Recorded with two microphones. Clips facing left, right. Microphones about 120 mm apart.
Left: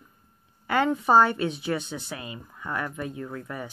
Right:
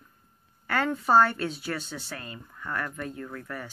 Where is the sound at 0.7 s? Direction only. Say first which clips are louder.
Left 3 dB; 15° left (ahead or behind).